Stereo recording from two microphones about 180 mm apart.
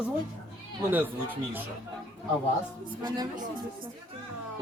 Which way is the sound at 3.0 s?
25° right (ahead or behind).